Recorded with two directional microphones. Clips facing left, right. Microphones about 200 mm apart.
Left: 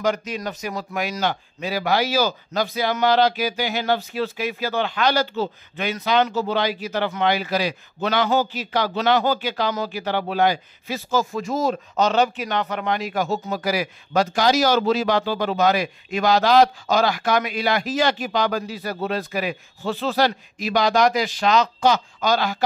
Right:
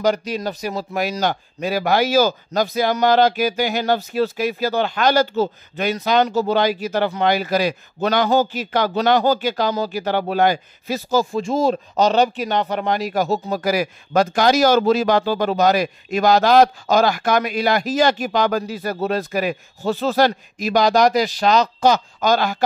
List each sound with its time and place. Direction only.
0.0 s speech: 35° right (ahead or behind)